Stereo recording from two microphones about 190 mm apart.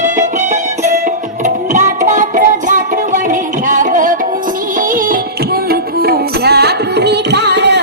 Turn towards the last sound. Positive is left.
turn(degrees=-65)  # may be behind; listen again after turning